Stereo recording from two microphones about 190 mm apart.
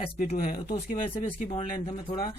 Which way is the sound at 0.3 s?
50° left (ahead or behind).